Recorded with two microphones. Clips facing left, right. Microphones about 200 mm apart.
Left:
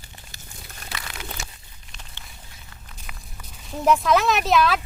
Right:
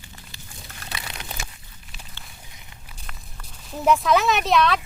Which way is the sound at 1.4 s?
90° right.